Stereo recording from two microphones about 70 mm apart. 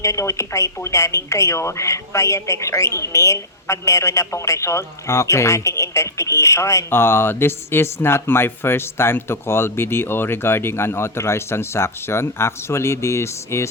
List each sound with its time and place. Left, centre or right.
0.0 s speech: left
6.9 s speech: left